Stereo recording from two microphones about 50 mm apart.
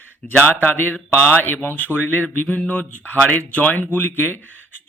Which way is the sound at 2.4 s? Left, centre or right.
Left.